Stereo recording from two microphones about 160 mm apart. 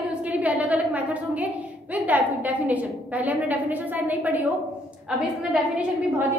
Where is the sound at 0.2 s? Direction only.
10° right (ahead or behind).